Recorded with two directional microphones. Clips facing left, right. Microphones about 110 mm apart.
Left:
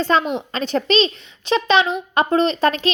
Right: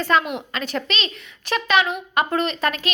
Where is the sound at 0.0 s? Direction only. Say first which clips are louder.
Left 2 dB; 30° left (ahead or behind).